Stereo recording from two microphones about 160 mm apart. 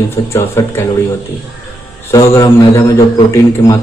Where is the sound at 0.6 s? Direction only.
20° left (ahead or behind).